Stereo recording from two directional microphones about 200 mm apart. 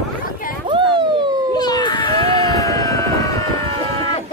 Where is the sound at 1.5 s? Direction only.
20° left (ahead or behind).